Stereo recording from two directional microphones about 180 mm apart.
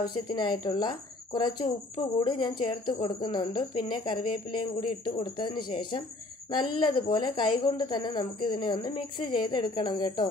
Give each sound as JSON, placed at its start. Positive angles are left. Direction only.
{"t": 0.0, "sound": "a woman's voice", "side_deg": 25}